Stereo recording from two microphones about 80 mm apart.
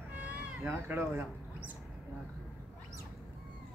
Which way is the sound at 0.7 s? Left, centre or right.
Right.